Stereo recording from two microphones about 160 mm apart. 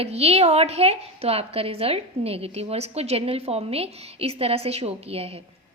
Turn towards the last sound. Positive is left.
turn(degrees=-40)  # may be behind; listen again after turning